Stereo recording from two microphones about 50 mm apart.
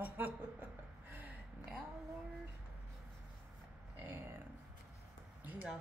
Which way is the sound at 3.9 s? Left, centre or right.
Right.